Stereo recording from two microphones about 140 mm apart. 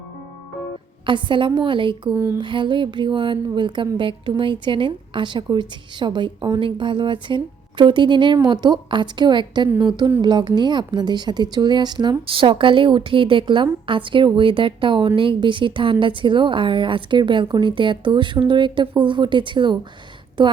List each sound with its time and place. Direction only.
1.0 s speech: 35° right (ahead or behind)
2.0 s a sound: 15° right (ahead or behind)
2.4 s speech: 35° right (ahead or behind)